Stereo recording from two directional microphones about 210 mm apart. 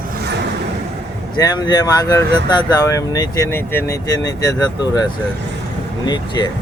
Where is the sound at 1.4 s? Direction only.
20° left (ahead or behind).